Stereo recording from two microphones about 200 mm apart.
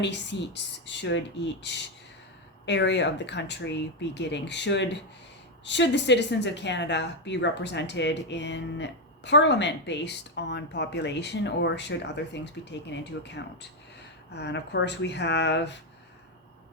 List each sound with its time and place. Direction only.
0.0 s a woman's voice: 60° left (ahead or behind)